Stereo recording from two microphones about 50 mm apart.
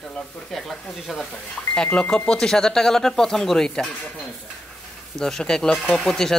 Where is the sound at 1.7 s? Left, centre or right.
Centre.